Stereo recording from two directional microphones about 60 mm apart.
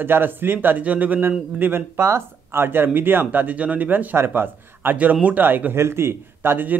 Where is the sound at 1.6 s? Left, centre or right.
Right.